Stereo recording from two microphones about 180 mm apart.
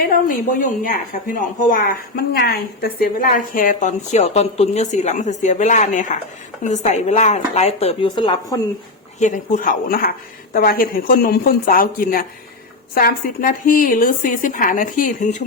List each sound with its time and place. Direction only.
0.0 s a woman's voice: 50° left (ahead or behind); by 8.5 s 25° left (ahead or behind)
9.1 s speech: 45° left (ahead or behind)